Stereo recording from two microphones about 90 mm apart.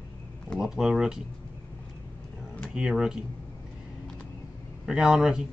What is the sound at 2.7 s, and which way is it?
Speech, 10° right (ahead or behind).